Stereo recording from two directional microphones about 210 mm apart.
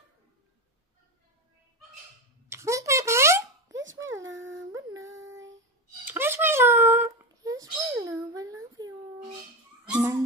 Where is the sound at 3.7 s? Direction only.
65° right (ahead or behind).